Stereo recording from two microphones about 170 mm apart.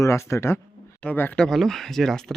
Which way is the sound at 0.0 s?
15° left (ahead or behind).